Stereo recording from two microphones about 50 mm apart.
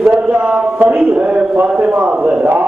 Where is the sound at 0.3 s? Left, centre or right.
Right.